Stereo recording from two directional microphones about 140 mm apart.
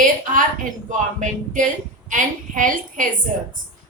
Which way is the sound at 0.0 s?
70° right (ahead or behind).